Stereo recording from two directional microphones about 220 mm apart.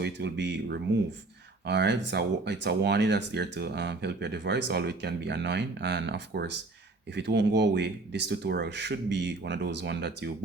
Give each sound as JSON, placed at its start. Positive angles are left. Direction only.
{"t": 0.0, "sound": "speech", "side_deg": -50}